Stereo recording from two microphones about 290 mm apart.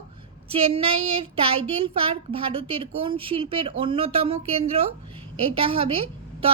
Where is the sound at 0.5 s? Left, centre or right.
Centre.